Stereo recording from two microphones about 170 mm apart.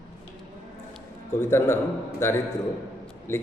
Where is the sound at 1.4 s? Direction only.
15° left (ahead or behind).